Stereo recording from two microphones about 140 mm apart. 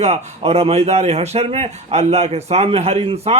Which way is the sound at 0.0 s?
50° right (ahead or behind).